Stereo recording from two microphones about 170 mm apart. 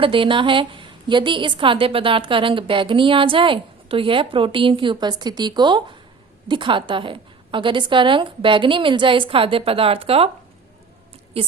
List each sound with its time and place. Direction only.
0.0 s a woman's voice: 30° right (ahead or behind)